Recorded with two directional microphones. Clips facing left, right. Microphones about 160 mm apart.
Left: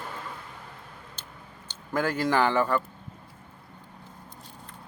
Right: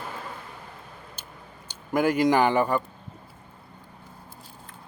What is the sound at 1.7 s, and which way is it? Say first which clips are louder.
A man's voice: right 5 dB; 15° right (ahead or behind).